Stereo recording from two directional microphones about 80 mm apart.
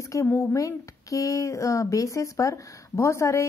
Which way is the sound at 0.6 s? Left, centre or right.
Left.